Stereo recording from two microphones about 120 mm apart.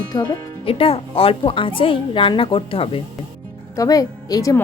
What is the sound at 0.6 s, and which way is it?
A woman's voice, 50° left (ahead or behind).